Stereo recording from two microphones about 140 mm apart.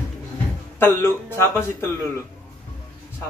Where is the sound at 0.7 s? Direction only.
15° left (ahead or behind).